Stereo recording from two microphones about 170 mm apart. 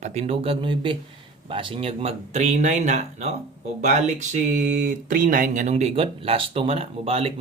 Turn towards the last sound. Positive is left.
turn(degrees=-35)  # may be behind; listen again after turning